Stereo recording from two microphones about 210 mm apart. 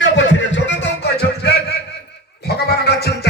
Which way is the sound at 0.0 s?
60° left (ahead or behind).